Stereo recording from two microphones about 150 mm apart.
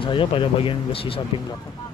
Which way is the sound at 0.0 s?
35° left (ahead or behind).